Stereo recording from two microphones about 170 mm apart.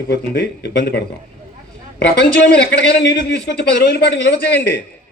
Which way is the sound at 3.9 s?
75° left (ahead or behind).